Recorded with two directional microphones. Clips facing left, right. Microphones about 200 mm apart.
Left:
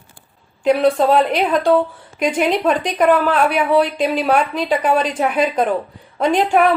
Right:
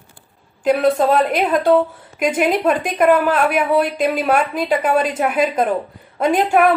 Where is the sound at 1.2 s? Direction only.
5° right (ahead or behind).